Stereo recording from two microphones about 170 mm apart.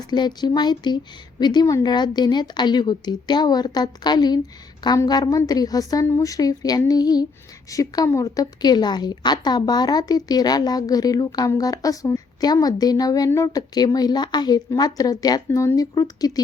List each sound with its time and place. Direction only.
0.1 s a woman's voice: 25° left (ahead or behind)